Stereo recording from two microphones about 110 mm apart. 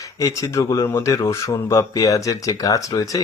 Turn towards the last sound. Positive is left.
turn(degrees=30)  # may be behind; listen again after turning